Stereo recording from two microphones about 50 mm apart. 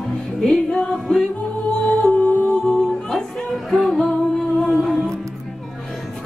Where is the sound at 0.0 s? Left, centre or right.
Centre.